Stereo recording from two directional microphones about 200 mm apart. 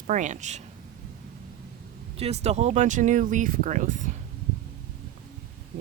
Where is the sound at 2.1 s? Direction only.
30° right (ahead or behind).